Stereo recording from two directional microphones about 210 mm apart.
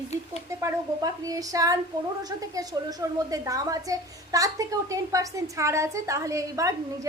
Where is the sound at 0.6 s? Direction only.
15° right (ahead or behind).